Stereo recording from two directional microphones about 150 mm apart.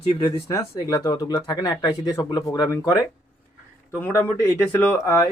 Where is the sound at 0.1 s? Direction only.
25° left (ahead or behind).